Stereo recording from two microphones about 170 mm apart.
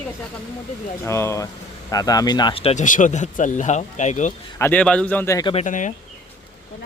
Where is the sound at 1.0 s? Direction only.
15° left (ahead or behind); by 2.8 s 35° left (ahead or behind).